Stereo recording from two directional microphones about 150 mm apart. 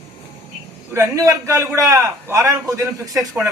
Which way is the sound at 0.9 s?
20° right (ahead or behind).